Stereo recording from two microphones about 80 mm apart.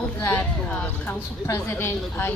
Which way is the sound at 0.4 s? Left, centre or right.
Centre.